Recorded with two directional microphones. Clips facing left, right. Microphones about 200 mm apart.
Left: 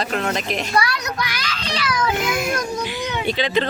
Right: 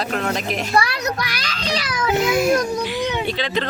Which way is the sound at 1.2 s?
40° right (ahead or behind).